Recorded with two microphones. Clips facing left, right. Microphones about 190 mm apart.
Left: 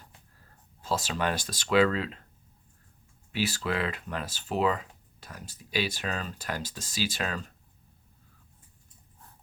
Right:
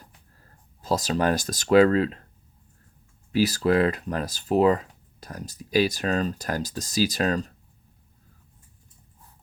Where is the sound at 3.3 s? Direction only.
40° right (ahead or behind).